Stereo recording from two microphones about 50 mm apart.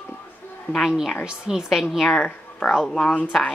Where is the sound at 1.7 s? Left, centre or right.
Centre.